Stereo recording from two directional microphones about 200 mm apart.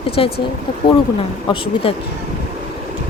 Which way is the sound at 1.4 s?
25° left (ahead or behind).